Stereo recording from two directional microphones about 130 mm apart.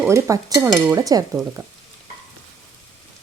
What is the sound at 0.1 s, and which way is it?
Speech, 25° right (ahead or behind).